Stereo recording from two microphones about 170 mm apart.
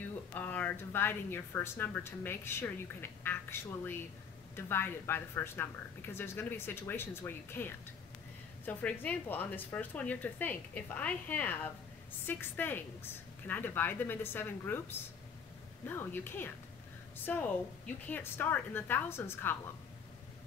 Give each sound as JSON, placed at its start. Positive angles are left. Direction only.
{"t": 0.3, "sound": "speech", "side_deg": 10}